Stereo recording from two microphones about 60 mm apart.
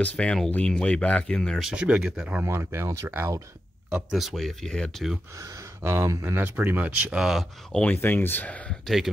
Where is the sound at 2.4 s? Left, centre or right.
Right.